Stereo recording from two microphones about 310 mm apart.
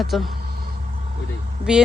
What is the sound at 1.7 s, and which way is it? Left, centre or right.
Speech, centre.